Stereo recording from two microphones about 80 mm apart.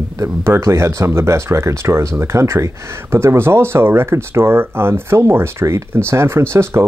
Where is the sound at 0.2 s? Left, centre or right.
Right.